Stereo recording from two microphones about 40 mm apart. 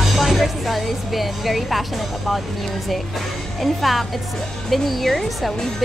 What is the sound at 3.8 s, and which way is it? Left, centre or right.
Speech, centre.